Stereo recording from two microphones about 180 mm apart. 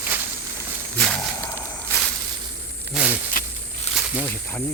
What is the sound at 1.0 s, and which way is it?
Wild animals, 5° left (ahead or behind).